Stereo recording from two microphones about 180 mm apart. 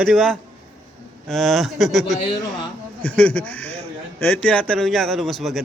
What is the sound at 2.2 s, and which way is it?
Speech, 25° left (ahead or behind).